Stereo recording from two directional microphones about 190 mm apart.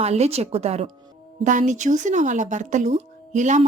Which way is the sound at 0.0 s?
35° right (ahead or behind).